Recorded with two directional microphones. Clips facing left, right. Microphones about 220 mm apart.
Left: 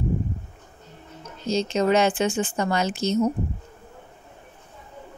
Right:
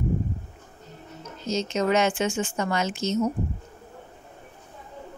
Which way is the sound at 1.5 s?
30° left (ahead or behind).